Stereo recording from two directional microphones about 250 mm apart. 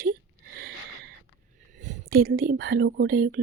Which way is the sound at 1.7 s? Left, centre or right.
Right.